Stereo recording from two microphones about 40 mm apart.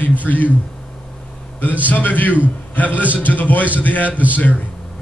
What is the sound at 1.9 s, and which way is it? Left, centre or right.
A man's voice, left.